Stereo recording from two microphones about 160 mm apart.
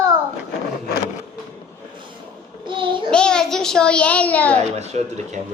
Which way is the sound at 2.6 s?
30° right (ahead or behind).